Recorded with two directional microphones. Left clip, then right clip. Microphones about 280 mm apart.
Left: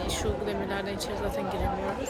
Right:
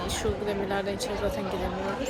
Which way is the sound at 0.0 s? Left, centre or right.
Centre.